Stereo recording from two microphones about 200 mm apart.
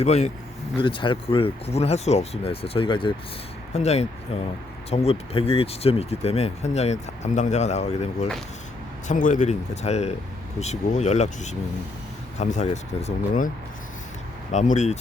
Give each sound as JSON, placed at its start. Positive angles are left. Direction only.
{"t": 0.0, "sound": "speech", "side_deg": 35}
{"t": 14.5, "sound": "speech", "side_deg": 35}